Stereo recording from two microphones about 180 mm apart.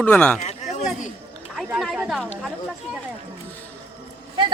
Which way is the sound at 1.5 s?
Centre (ahead or behind).